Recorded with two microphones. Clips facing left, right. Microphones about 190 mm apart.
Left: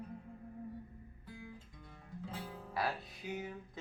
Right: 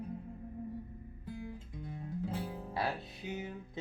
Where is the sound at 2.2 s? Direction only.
25° right (ahead or behind).